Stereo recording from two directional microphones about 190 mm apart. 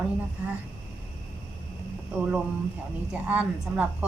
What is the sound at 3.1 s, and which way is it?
Speech, 10° right (ahead or behind).